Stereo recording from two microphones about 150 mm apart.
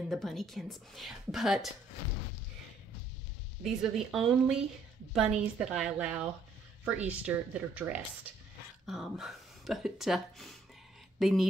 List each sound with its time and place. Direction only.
0.1 s speech: centre (ahead or behind)
3.6 s speech: centre (ahead or behind)